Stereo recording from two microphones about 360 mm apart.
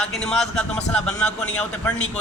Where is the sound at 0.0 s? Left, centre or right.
Centre.